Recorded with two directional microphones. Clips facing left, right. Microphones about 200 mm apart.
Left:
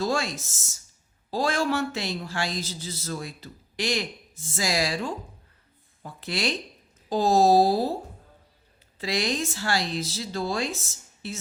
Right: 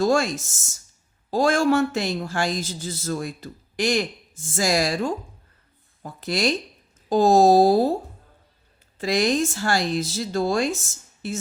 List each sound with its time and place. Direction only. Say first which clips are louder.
0.0 s speech: right 6 dB; 45° right (ahead or behind)
9.0 s speech: right 6 dB; 50° right (ahead or behind)